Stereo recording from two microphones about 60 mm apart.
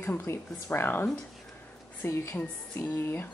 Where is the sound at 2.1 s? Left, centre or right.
Left.